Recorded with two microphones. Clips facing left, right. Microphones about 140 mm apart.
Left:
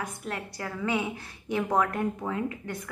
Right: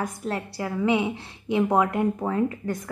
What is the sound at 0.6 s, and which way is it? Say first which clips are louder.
A woman's voice: right 6 dB; 20° right (ahead or behind).